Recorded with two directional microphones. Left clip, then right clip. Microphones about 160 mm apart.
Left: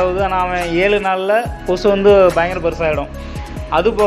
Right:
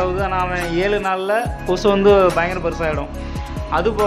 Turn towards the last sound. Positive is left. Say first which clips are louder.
# left 4 dB
turn(degrees=5)  # may be behind; listen again after turning